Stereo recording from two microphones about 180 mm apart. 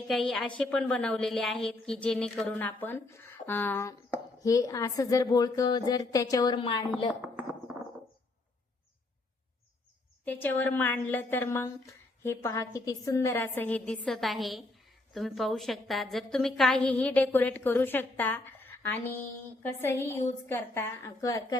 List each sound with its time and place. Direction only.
0.1 s a woman's voice: centre (ahead or behind); by 6.8 s 25° left (ahead or behind)
7.1 s speech: 5° right (ahead or behind)
10.2 s a woman's voice: 10° left (ahead or behind)